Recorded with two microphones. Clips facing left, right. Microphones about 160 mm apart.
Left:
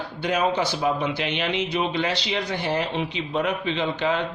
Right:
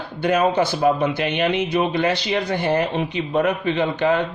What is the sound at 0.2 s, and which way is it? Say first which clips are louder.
Speech: right 5 dB; 50° right (ahead or behind).